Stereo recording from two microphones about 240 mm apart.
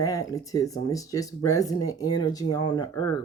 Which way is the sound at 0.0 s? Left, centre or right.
Centre.